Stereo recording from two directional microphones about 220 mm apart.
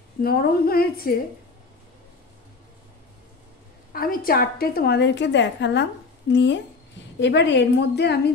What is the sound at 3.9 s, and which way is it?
A woman's voice, 40° left (ahead or behind).